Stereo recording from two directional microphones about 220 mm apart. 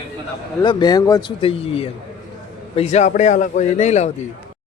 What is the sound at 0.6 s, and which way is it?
A man's voice, 20° left (ahead or behind).